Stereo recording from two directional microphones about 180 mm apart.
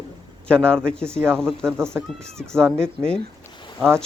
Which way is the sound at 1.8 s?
15° right (ahead or behind).